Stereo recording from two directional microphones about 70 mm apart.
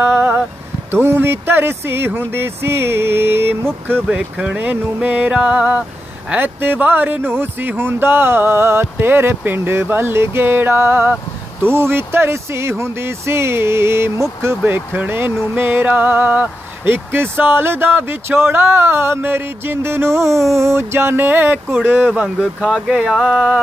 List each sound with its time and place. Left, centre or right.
0.0 s a sound: right
0.9 s speech: right
4.1 s speech: centre
6.3 s speech: right
14.6 s speech: right
22.6 s speech: centre